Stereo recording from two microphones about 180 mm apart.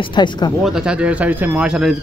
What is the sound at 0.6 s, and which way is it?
Speech, 5° right (ahead or behind).